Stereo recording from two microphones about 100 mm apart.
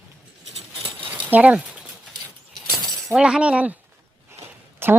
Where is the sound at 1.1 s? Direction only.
15° right (ahead or behind).